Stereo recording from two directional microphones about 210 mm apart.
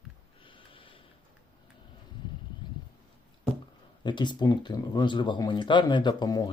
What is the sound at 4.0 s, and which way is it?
Speech, 20° left (ahead or behind).